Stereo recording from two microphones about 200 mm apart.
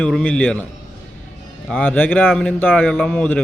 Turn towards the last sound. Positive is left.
turn(degrees=5)  # may be behind; listen again after turning